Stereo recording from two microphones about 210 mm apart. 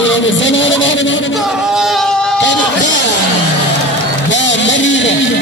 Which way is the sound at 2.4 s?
60° left (ahead or behind).